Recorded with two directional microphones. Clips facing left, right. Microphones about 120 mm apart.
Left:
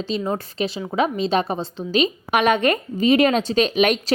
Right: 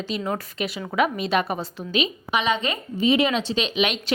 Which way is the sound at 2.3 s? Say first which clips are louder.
Left 6 dB; 60° left (ahead or behind).